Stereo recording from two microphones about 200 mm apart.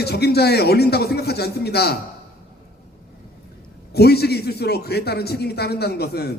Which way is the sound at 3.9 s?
55° left (ahead or behind).